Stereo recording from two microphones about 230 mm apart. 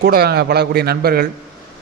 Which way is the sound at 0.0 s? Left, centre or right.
Right.